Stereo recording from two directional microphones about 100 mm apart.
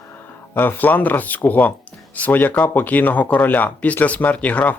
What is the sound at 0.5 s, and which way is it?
Speech, 20° left (ahead or behind).